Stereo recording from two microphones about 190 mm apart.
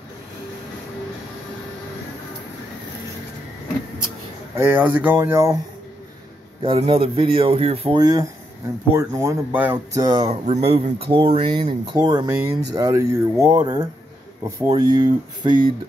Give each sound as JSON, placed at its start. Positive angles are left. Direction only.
{"t": 4.6, "sound": "speech", "side_deg": -10}
{"t": 6.6, "sound": "speech", "side_deg": -25}
{"t": 10.0, "sound": "speech", "side_deg": -30}